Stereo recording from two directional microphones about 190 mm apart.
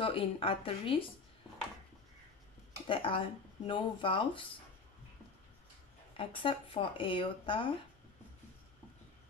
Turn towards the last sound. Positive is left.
turn(degrees=25)  # may be behind; listen again after turning